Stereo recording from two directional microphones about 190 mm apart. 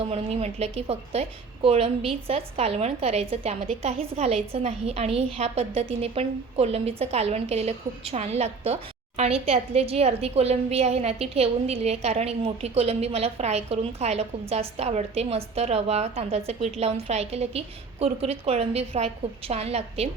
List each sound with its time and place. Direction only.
0.0 s a woman's voice: 30° right (ahead or behind)